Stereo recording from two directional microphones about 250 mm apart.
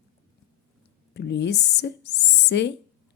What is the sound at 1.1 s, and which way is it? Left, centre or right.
A woman's voice, left.